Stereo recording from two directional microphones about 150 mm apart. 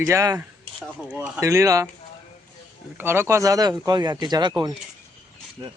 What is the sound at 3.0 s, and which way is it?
Speech, 15° right (ahead or behind).